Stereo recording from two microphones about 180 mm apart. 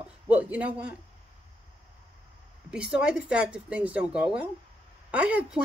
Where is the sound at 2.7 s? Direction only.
5° right (ahead or behind).